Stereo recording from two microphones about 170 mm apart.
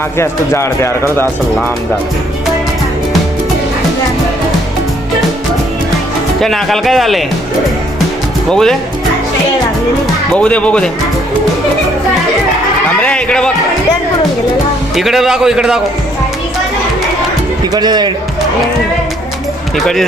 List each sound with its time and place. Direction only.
0.2 s speech: 15° left (ahead or behind)
6.4 s speech: centre (ahead or behind)
8.4 s speech: 5° left (ahead or behind)
10.3 s speech: 5° left (ahead or behind)
13.0 s a sound: 5° left (ahead or behind)
14.9 s speech: centre (ahead or behind)
17.7 s speech: 25° right (ahead or behind)
19.7 s speech: centre (ahead or behind)